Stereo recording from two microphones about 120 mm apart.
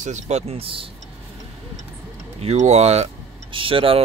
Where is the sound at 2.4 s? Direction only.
65° right (ahead or behind).